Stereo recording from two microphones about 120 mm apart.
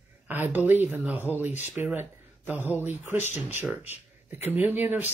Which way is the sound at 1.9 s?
15° right (ahead or behind).